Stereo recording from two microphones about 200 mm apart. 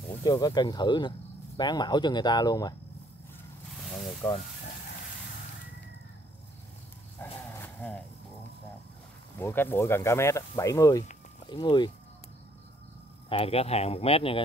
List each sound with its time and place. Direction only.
0.1 s speech: 20° left (ahead or behind)
4.2 s speech: 10° left (ahead or behind)
7.2 s dog: 10° left (ahead or behind)
9.4 s speech: 10° left (ahead or behind)
13.3 s speech: 30° left (ahead or behind)